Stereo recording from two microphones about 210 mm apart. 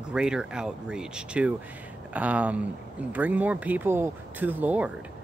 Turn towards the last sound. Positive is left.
turn(degrees=-10)  # may be behind; listen again after turning